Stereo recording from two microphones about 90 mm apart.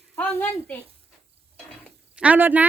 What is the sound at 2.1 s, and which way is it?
Speech, 15° right (ahead or behind).